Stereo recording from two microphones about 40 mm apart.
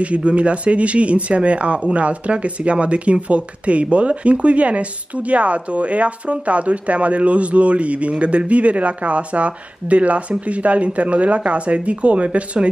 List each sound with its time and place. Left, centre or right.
0.0 s speech: right